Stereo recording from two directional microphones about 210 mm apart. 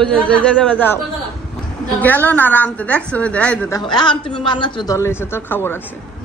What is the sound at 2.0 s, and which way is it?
A woman's voice, 10° left (ahead or behind).